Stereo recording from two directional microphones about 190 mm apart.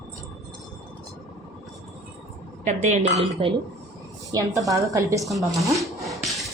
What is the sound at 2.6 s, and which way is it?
Speech, 40° right (ahead or behind).